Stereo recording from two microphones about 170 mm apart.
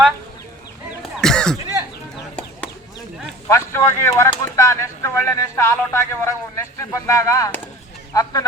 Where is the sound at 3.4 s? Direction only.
15° left (ahead or behind).